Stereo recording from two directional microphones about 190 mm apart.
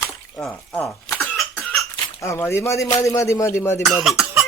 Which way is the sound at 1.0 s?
15° left (ahead or behind).